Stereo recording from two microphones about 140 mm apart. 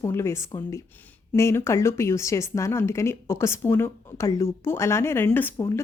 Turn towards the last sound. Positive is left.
turn(degrees=20)  # may be behind; listen again after turning